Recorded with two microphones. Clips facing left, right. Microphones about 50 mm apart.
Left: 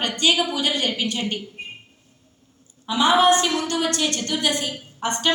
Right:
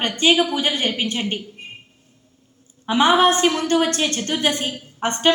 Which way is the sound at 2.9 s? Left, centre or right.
Right.